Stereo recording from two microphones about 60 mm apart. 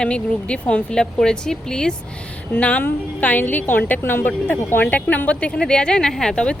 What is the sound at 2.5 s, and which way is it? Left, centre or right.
A woman's voice, left.